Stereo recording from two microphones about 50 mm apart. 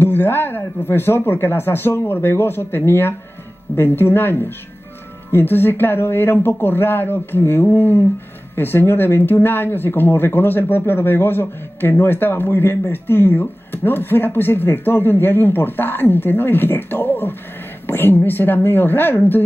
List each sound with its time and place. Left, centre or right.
0.0 s speech: left